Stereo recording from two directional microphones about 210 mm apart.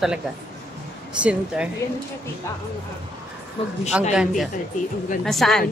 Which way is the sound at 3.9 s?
5° right (ahead or behind).